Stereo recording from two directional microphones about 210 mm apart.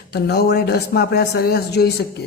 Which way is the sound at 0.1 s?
50° left (ahead or behind).